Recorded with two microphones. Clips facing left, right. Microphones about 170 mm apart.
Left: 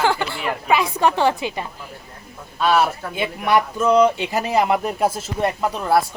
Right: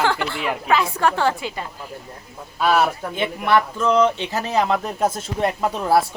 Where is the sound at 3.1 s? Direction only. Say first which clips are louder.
Left 1 dB; 10° left (ahead or behind).